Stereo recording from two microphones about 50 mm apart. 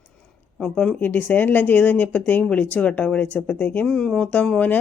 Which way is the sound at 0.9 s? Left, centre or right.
Left.